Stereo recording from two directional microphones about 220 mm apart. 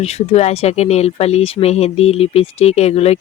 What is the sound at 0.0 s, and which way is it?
A woman's voice, 30° left (ahead or behind).